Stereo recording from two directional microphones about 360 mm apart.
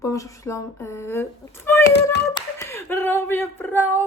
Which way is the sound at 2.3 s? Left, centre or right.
Centre.